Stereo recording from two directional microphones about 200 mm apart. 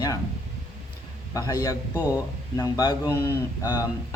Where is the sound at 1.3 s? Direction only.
15° left (ahead or behind).